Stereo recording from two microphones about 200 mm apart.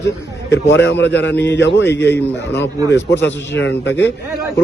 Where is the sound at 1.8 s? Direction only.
10° left (ahead or behind).